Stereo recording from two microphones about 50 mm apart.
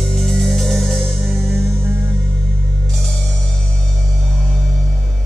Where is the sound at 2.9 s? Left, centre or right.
Centre.